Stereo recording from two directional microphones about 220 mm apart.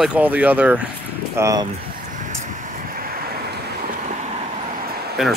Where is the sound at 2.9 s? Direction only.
40° right (ahead or behind).